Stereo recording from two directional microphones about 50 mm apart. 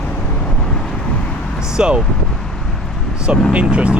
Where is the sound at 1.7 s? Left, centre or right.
Centre.